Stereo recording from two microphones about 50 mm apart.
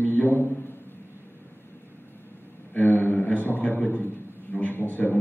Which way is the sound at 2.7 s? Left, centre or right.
Left.